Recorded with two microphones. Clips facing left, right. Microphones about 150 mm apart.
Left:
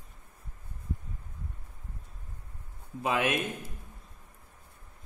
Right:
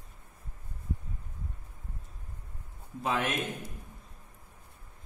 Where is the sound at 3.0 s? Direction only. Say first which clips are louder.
Left 2 dB; 15° left (ahead or behind).